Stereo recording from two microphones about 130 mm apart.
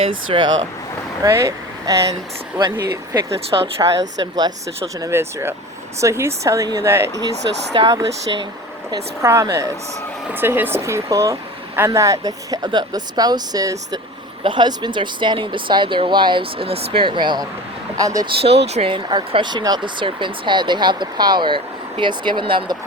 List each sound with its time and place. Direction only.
0.3 s speech: 35° right (ahead or behind)
1.2 s speech: 20° right (ahead or behind)
9.2 s speech: 20° right (ahead or behind)
18.3 s speech: 50° right (ahead or behind)